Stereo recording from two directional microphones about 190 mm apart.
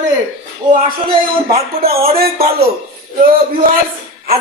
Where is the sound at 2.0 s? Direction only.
55° right (ahead or behind).